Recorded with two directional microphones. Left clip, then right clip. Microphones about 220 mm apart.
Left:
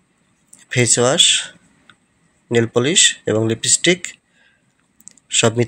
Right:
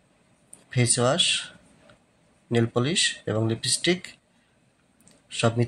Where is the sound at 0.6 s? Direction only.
30° left (ahead or behind).